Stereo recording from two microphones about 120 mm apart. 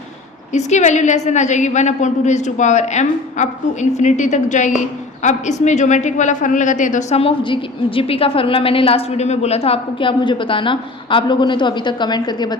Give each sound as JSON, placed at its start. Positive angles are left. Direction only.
{"t": 0.5, "sound": "a woman's voice", "side_deg": 75}
{"t": 5.2, "sound": "a woman's voice", "side_deg": 75}
{"t": 7.2, "sound": "a woman's voice", "side_deg": 45}